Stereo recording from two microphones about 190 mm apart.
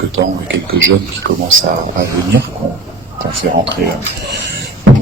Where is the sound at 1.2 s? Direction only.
55° right (ahead or behind).